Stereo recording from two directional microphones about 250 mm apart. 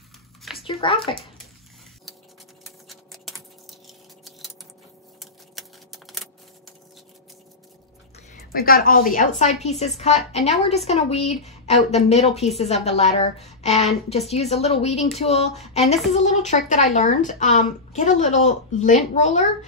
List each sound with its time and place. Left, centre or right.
0.4 s a sound: centre
0.7 s a woman's voice: left
2.9 s typing: centre
5.2 s tick-tock: centre
8.3 s a woman's voice: left